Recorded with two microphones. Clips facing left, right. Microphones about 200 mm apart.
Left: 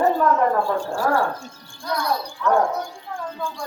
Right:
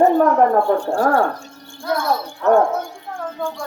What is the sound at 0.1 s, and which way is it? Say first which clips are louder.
Speech: right 5 dB; 60° right (ahead or behind).